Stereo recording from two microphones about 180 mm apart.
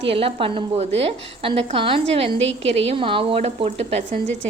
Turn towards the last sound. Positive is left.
turn(degrees=-40)  # may be behind; listen again after turning